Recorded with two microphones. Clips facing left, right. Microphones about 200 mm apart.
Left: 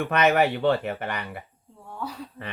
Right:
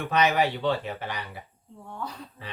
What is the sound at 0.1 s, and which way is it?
Speech, 60° left (ahead or behind).